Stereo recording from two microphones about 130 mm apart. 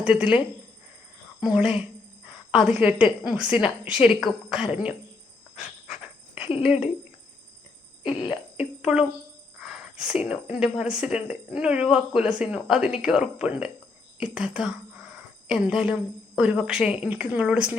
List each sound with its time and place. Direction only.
0.0 s a woman's voice: 10° right (ahead or behind)
6.7 s a woman's voice: 5° right (ahead or behind)
8.0 s cough: 40° left (ahead or behind)
8.5 s a woman's voice: 5° right (ahead or behind)